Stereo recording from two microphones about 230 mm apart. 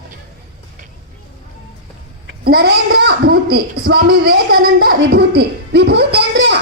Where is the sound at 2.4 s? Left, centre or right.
Right.